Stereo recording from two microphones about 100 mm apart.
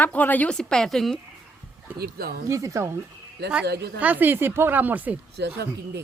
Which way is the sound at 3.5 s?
15° right (ahead or behind).